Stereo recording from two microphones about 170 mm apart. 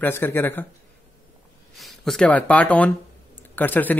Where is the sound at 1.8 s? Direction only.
Centre (ahead or behind).